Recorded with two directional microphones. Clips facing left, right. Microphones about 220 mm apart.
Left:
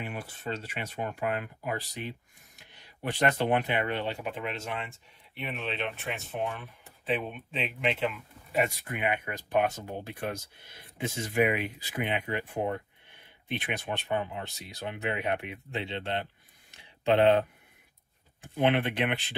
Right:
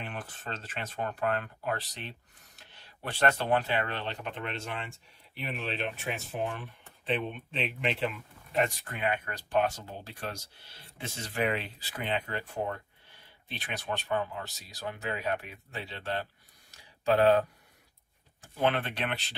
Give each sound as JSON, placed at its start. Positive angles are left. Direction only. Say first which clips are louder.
{"t": 0.0, "sound": "speech", "louder": "left 3 dB", "side_deg": 10}
{"t": 18.6, "sound": "speech", "louder": "left 3 dB", "side_deg": 15}